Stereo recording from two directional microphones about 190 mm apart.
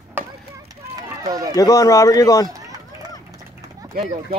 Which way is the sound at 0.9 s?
20° right (ahead or behind).